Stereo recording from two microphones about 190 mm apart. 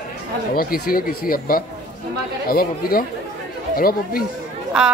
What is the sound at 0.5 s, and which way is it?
Speech, 50° left (ahead or behind).